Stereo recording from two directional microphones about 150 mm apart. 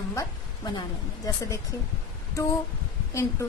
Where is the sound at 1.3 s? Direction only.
25° left (ahead or behind).